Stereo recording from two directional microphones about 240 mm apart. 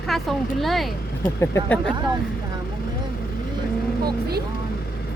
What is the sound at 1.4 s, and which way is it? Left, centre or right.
Speech, centre.